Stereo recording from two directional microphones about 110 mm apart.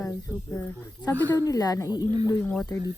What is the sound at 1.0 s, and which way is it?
A woman's voice, 35° left (ahead or behind).